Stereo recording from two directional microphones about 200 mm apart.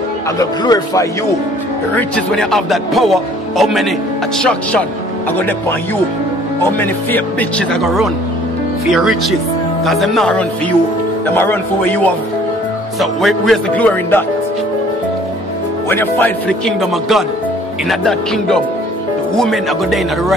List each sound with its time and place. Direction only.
0.4 s speech: 20° left (ahead or behind)
2.0 s speech: 5° left (ahead or behind)
6.8 s speech: 10° left (ahead or behind)
15.9 s speech: 10° left (ahead or behind)